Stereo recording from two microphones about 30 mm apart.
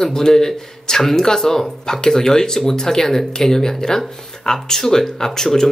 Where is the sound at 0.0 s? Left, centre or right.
Centre.